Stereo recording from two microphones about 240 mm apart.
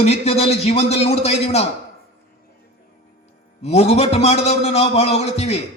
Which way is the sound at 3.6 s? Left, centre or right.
Left.